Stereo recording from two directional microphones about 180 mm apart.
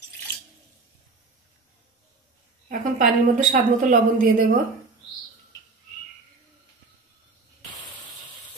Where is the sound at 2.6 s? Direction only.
45° right (ahead or behind).